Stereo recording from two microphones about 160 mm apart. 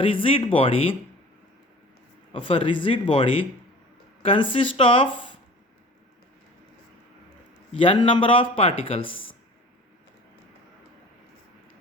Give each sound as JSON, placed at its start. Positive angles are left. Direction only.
{"t": 0.0, "sound": "speech", "side_deg": 35}
{"t": 2.3, "sound": "speech", "side_deg": 35}
{"t": 7.7, "sound": "speech", "side_deg": 35}